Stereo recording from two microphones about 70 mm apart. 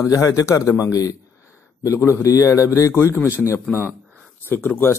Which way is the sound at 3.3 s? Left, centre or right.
Left.